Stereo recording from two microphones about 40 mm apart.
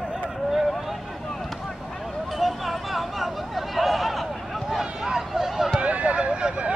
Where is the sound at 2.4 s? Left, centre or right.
Centre.